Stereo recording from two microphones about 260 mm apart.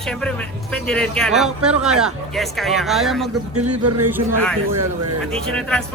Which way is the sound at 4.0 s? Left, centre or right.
Centre.